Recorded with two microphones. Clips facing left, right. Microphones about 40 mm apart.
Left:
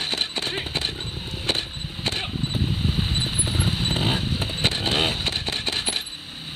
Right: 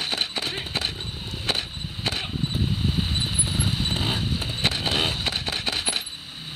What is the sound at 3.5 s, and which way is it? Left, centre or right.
Vehicle, centre.